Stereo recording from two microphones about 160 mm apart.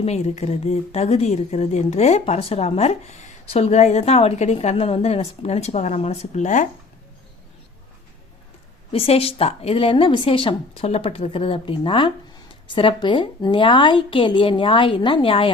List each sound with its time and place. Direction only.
0.0 s speech: 40° left (ahead or behind)
8.9 s speech: 35° left (ahead or behind)